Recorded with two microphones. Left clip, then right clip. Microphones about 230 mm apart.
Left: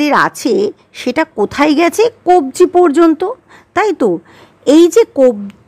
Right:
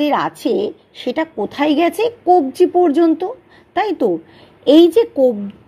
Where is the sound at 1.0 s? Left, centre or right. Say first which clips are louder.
Left 6 dB; left.